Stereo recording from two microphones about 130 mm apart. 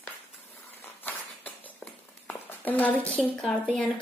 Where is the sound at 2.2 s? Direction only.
15° left (ahead or behind).